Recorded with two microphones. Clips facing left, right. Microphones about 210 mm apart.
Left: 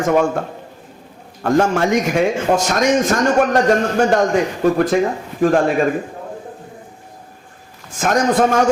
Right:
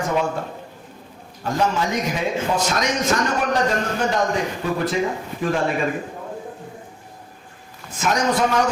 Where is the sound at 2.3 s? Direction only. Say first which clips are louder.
Left 5 dB; 50° left (ahead or behind).